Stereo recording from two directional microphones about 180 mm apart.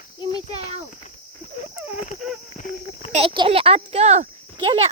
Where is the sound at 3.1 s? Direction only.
30° right (ahead or behind).